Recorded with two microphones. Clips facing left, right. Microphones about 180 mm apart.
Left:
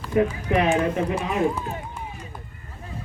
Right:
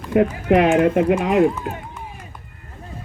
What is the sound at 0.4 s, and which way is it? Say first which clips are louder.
Speech: right 6 dB; 60° right (ahead or behind).